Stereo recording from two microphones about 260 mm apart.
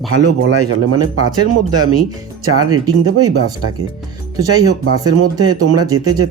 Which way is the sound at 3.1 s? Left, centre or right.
Right.